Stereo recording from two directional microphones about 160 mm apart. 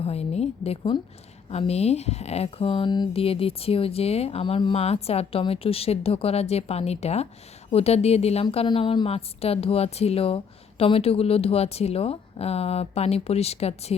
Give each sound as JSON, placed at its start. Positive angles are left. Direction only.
{"t": 0.0, "sound": "a woman's voice", "side_deg": 40}